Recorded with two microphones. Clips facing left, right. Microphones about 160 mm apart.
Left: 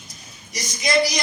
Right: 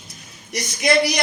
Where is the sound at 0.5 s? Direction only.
60° right (ahead or behind).